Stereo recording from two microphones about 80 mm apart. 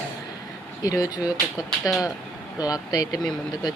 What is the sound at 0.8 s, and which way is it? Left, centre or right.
Speech, left.